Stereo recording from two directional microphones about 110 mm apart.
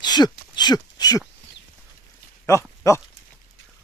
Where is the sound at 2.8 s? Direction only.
30° left (ahead or behind).